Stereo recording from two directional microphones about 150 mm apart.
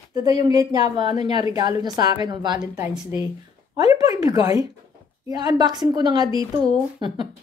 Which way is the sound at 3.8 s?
25° right (ahead or behind).